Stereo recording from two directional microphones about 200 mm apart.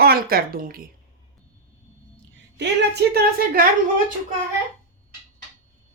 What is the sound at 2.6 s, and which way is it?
A woman's voice, 55° right (ahead or behind).